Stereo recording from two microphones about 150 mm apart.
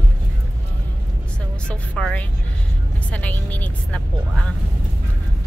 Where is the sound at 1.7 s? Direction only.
5° left (ahead or behind).